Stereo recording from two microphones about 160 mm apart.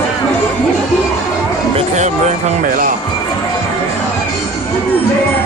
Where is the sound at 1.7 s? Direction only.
45° right (ahead or behind).